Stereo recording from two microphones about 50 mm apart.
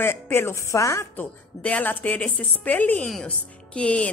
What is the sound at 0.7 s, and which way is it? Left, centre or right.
Speech, left.